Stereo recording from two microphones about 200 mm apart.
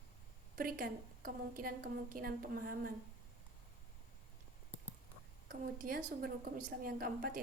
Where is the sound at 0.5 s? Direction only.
45° right (ahead or behind).